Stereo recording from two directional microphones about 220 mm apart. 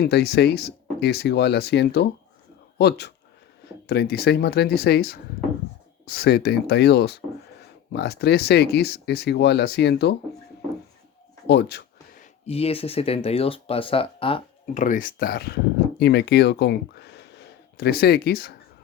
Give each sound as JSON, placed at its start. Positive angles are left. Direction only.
{"t": 0.0, "sound": "speech", "side_deg": 45}
{"t": 11.4, "sound": "a sound", "side_deg": 50}
{"t": 12.2, "sound": "speech", "side_deg": 25}